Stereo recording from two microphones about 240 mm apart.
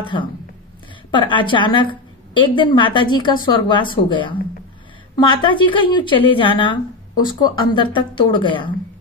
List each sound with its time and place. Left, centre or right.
0.0 s a woman's voice: centre